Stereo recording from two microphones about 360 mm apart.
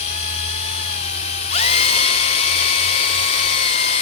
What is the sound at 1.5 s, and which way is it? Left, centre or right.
Dental drill, centre.